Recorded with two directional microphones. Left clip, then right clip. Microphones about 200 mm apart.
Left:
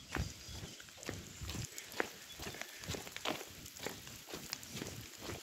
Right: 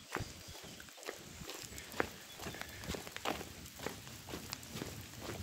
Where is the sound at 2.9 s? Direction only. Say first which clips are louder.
Right 1 dB; 5° right (ahead or behind).